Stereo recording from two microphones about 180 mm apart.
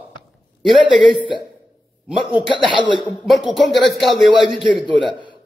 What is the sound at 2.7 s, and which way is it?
Speech, 25° right (ahead or behind).